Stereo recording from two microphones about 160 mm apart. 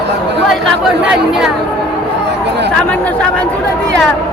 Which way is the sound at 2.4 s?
90° right.